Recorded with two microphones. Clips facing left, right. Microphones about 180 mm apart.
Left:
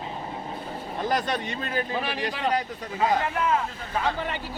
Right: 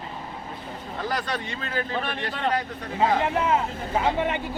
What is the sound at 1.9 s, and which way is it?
Speech, 5° left (ahead or behind).